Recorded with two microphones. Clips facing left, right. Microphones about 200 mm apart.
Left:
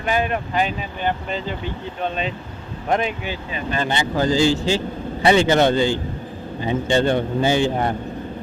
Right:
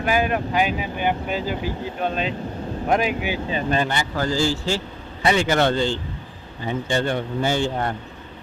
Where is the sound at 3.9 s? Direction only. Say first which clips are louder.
Left 4 dB; 20° left (ahead or behind).